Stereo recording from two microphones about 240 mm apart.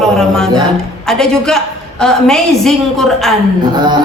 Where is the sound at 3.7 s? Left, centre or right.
Centre.